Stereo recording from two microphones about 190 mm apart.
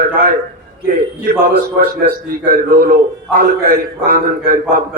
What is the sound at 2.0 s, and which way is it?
A man's voice, 50° right (ahead or behind).